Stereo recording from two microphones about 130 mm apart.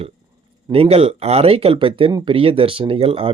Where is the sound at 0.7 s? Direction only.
50° right (ahead or behind).